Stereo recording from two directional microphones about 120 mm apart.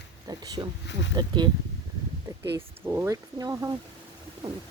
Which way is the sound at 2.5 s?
20° right (ahead or behind).